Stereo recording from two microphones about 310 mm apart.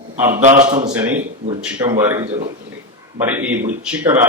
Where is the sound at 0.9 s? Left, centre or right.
Centre.